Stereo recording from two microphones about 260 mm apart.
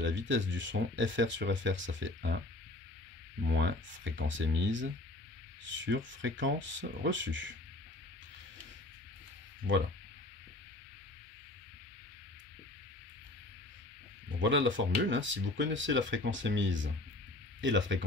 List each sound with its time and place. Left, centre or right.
0.0 s speech: right
3.4 s speech: right
14.4 s speech: right